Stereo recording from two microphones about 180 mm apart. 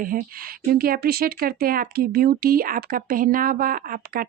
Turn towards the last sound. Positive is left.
turn(degrees=-50)  # may be behind; listen again after turning